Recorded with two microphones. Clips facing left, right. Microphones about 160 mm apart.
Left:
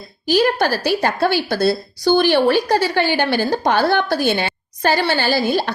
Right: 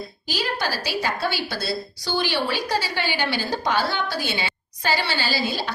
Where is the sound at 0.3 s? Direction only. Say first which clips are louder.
Left 11 dB; 50° left (ahead or behind).